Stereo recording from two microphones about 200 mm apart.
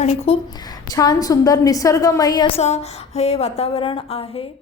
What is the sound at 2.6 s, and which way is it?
A woman's voice, 30° left (ahead or behind).